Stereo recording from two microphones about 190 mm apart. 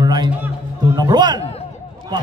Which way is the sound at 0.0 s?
20° right (ahead or behind).